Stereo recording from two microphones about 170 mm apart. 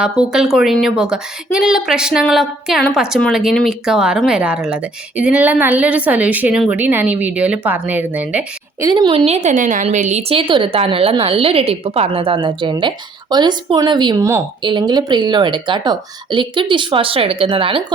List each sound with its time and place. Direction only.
0.0 s a woman's voice: 5° right (ahead or behind)
8.8 s a woman's voice: 25° right (ahead or behind)